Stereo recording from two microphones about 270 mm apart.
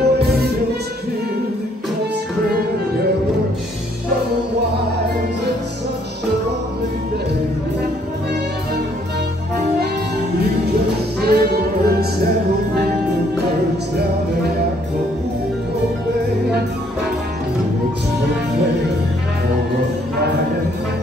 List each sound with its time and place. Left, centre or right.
0.0 s music: right
11.1 s music: right